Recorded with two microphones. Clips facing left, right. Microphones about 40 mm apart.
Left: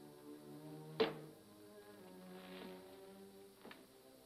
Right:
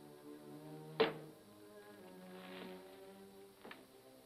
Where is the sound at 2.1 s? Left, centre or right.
Centre.